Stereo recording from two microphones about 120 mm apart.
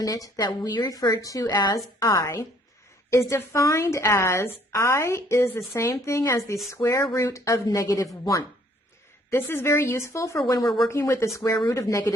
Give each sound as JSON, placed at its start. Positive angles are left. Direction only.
{"t": 0.0, "sound": "a woman's voice", "side_deg": 30}